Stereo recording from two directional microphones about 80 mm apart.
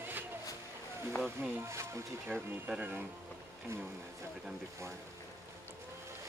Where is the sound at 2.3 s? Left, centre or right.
Centre.